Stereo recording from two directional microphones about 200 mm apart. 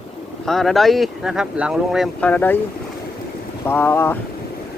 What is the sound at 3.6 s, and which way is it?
Speech, 10° left (ahead or behind).